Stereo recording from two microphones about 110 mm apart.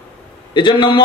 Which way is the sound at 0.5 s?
45° left (ahead or behind).